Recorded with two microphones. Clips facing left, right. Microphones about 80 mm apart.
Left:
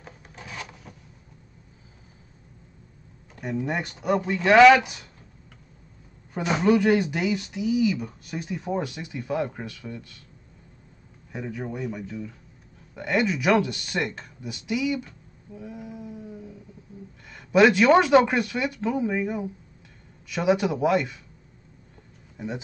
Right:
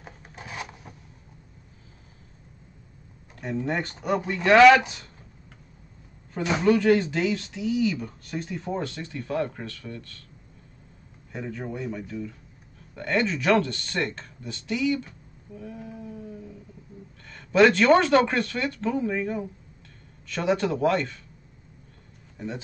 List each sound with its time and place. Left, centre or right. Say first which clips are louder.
0.5 s a sound: right 2 dB; centre
3.3 s speech: even; centre
6.3 s speech: left 1 dB; centre
11.3 s speech: left 1 dB; centre
15.5 s a sound: left 1 dB; centre
17.3 s speech: even; centre
22.4 s speech: left 1 dB; centre